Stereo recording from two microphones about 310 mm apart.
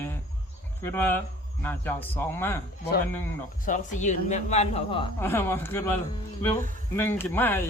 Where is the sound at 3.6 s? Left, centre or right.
Left; by 7.6 s centre.